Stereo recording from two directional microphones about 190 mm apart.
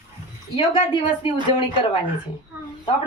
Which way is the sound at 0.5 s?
30° left (ahead or behind).